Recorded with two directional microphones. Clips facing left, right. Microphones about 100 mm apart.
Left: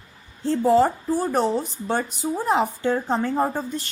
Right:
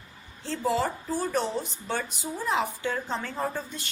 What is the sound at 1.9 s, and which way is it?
A woman's voice, 40° left (ahead or behind).